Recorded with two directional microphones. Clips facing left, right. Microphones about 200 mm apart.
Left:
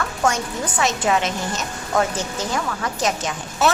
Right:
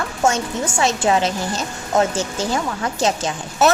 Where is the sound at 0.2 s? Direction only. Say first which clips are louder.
Right 3 dB; 25° right (ahead or behind).